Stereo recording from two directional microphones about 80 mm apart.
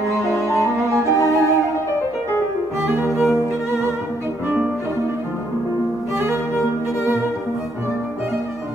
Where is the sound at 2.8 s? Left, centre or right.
Right.